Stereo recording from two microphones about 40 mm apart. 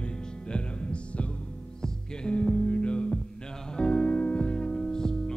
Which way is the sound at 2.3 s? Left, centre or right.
Left.